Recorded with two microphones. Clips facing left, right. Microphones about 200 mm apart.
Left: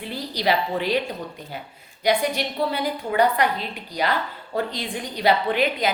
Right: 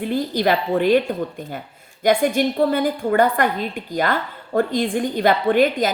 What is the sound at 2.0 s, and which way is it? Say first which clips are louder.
A woman's voice: right 5 dB; 50° right (ahead or behind).